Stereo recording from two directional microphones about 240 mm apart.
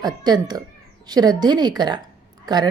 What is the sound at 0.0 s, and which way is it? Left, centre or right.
A woman's voice, centre.